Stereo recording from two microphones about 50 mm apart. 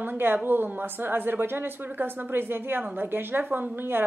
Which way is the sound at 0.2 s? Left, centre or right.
Right.